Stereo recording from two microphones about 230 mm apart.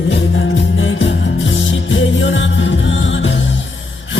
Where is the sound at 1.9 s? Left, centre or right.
Left.